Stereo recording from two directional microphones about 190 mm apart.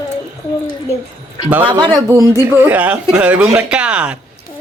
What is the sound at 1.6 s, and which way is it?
A woman's voice, 20° right (ahead or behind).